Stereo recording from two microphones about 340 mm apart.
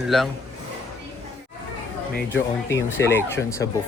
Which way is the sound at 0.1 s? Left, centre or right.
Centre.